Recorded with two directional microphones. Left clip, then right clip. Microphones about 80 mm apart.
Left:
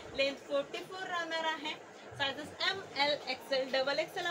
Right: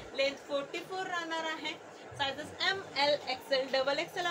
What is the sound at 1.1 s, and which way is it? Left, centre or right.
A woman's voice, right.